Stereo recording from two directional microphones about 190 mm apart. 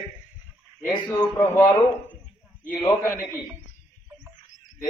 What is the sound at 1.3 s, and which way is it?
Speech, 10° left (ahead or behind).